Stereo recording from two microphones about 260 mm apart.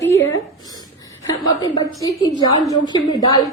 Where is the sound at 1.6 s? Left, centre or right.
Centre.